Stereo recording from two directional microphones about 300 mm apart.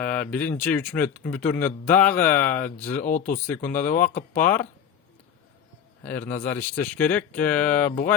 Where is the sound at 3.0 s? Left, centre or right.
Left.